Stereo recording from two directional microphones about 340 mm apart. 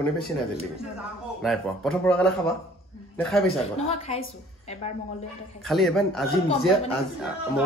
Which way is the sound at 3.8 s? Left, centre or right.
Centre.